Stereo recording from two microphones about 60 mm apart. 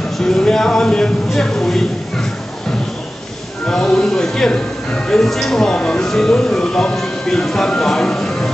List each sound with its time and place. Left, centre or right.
0.2 s a man's voice: centre
3.6 s speech: centre